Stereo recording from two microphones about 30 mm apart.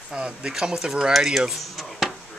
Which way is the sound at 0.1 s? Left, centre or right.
Right.